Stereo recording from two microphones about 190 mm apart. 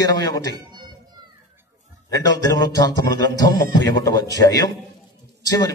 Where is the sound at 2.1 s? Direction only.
20° left (ahead or behind).